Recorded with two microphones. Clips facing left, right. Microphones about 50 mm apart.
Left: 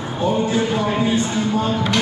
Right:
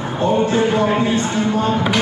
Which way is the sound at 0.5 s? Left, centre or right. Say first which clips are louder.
Right 4 dB; centre.